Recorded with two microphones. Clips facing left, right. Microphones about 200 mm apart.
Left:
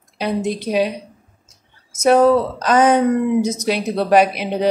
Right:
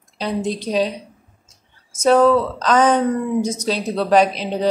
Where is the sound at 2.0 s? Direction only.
10° left (ahead or behind).